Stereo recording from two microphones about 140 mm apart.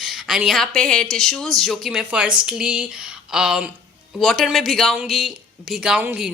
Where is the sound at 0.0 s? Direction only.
Centre (ahead or behind).